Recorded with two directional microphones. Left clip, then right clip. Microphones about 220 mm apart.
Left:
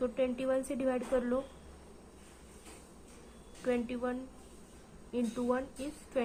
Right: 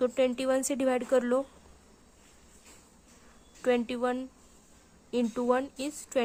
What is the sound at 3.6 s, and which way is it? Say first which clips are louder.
A woman's voice: right 6 dB; 55° right (ahead or behind).